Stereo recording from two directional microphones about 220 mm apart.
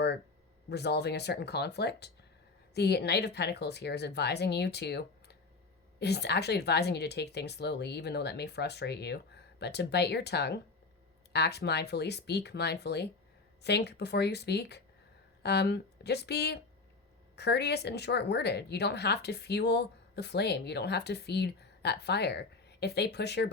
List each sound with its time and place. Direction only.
0.7 s speech: 50° left (ahead or behind)